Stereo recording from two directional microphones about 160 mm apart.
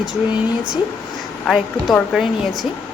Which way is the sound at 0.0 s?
5° right (ahead or behind).